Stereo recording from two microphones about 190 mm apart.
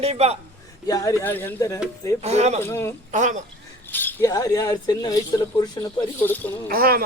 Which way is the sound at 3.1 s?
40° right (ahead or behind).